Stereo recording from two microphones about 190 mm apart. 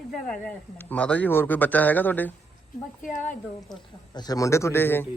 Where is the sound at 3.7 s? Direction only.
20° left (ahead or behind).